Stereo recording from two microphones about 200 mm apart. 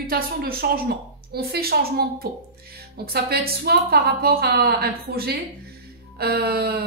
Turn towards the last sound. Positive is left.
turn(degrees=-50)  # may be behind; listen again after turning